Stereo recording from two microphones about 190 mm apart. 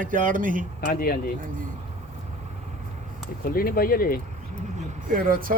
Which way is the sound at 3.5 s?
50° left (ahead or behind).